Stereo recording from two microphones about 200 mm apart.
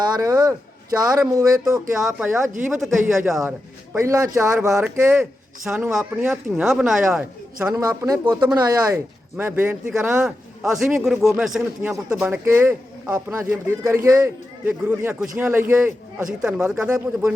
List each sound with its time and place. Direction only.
0.0 s a man's voice: 20° right (ahead or behind)
1.7 s speech: 5° right (ahead or behind)
3.9 s a man's voice: 15° right (ahead or behind)
7.7 s a man's voice: 15° right (ahead or behind)
9.4 s a man's voice: 10° right (ahead or behind)